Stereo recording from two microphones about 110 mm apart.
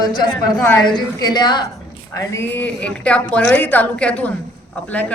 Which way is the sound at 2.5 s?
15° left (ahead or behind).